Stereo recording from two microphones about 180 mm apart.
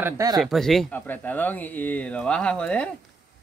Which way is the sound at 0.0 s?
20° right (ahead or behind).